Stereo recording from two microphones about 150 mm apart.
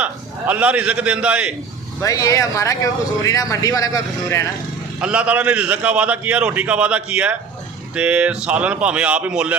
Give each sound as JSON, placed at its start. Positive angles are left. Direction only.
{"t": 0.0, "sound": "a man's voice", "side_deg": -10}
{"t": 2.0, "sound": "speech", "side_deg": 25}
{"t": 4.9, "sound": "a man's voice", "side_deg": -5}